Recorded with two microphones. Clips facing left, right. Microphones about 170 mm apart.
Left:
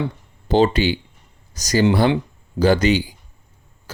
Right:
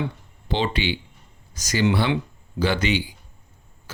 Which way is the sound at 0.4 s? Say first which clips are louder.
Left 8 dB; 45° left (ahead or behind).